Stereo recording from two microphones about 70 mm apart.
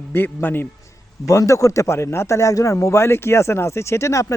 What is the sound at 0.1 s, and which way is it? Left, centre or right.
Speech, left.